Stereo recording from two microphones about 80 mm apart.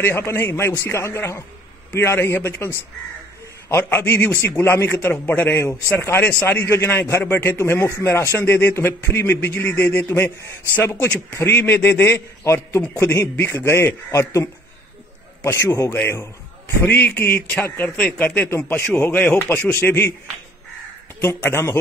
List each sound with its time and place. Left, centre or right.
0.0 s a man's voice: left
13.4 s a man's voice: left
16.0 s a man's voice: left
21.2 s a man's voice: left